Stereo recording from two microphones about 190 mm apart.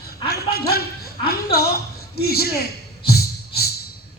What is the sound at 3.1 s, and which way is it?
Beatboxing, 55° left (ahead or behind).